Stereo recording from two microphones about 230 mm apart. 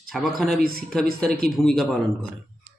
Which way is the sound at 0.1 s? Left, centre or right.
Centre.